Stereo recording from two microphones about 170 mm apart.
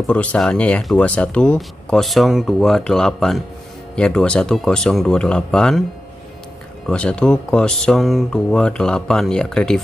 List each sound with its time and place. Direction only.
0.0 s speech: 5° left (ahead or behind)
6.9 s speech: 5° left (ahead or behind)